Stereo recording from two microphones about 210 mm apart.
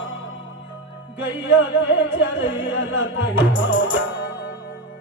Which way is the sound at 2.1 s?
60° left (ahead or behind).